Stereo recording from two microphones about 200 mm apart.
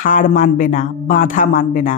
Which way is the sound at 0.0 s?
40° left (ahead or behind).